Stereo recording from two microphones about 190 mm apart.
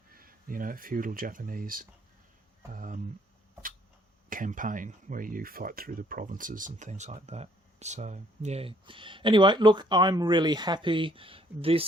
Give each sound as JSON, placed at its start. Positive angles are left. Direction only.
{"t": 0.1, "sound": "speech", "side_deg": -50}
{"t": 4.3, "sound": "speech", "side_deg": -45}